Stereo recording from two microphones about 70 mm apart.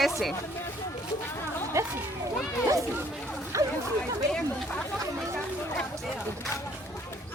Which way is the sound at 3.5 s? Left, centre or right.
Right.